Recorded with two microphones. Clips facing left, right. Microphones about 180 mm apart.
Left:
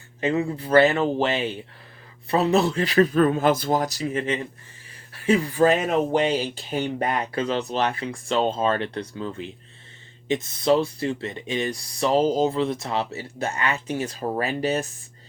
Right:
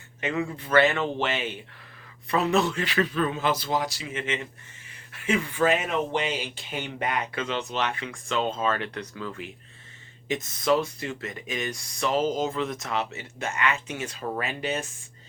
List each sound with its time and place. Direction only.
0.2 s speech: 30° left (ahead or behind)